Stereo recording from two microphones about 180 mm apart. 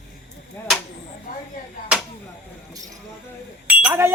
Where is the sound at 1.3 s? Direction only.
55° left (ahead or behind).